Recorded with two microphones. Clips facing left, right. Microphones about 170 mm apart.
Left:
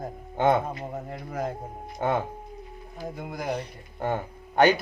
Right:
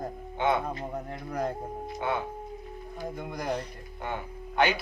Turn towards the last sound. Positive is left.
turn(degrees=45)  # may be behind; listen again after turning